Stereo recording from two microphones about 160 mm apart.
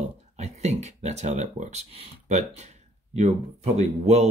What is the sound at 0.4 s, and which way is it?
Speech, 45° right (ahead or behind).